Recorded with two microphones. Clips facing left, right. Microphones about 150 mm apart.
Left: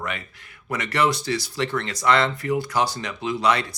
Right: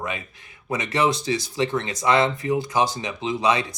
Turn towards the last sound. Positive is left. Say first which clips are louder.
# even
turn(degrees=-20)  # may be behind; listen again after turning